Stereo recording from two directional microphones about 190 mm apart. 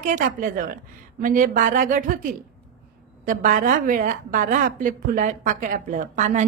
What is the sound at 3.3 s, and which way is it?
A woman's voice, 45° right (ahead or behind).